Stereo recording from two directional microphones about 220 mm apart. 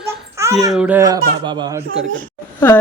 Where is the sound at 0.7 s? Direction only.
5° right (ahead or behind).